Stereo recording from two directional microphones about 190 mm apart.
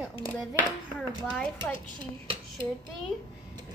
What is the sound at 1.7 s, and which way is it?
Speech, 25° right (ahead or behind).